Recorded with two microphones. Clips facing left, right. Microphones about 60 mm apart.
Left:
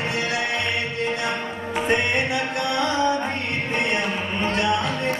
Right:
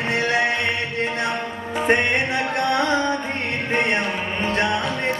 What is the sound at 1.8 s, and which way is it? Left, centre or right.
Music, right.